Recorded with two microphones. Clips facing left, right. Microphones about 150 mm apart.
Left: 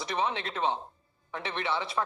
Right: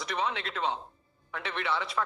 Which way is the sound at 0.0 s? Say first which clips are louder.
Left 2 dB; 30° left (ahead or behind).